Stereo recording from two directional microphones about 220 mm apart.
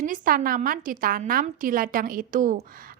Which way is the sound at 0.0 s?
40° right (ahead or behind).